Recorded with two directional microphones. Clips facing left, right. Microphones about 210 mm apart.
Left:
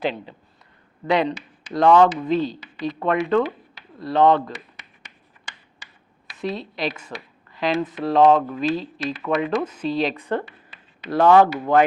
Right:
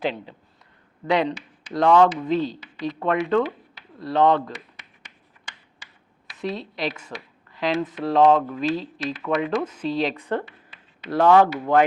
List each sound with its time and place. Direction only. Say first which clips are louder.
1.0 s a woman's voice: left 1 dB; 10° left (ahead or behind)
4.1 s a sound: left 2 dB; 10° left (ahead or behind)
6.7 s speech: left 1 dB; 10° left (ahead or behind)
8.4 s speech: left 1 dB; 20° left (ahead or behind)
8.6 s speech: left 1 dB; 10° left (ahead or behind)